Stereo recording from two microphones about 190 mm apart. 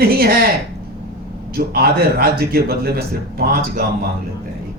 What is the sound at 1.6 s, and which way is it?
A man's voice, 55° right (ahead or behind).